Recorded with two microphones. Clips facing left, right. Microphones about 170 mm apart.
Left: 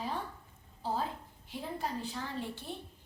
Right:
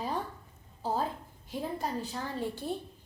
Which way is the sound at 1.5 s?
40° right (ahead or behind).